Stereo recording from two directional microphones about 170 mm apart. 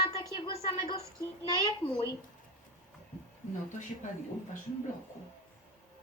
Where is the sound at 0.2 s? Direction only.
25° left (ahead or behind).